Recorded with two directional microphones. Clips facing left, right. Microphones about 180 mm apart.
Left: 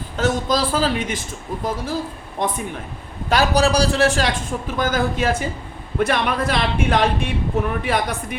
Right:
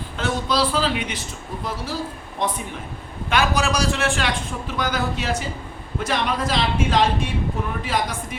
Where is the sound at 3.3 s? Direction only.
35° left (ahead or behind).